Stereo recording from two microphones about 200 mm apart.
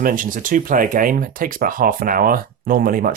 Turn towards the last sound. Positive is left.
turn(degrees=-45)  # may be behind; listen again after turning